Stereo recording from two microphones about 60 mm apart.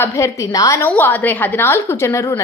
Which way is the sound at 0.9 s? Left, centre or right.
Left.